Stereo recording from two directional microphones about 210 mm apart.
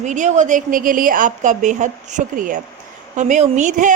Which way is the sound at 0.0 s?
35° right (ahead or behind).